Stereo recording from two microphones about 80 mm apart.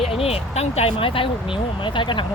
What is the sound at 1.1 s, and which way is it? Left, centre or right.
Speech, left.